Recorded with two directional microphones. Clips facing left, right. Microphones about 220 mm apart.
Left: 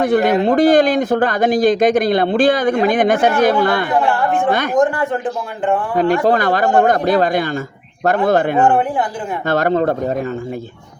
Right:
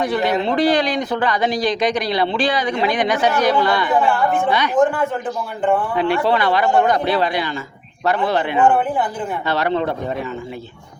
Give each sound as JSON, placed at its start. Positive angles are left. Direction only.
{"t": 0.0, "sound": "speech", "side_deg": 50}
{"t": 5.9, "sound": "speech", "side_deg": 45}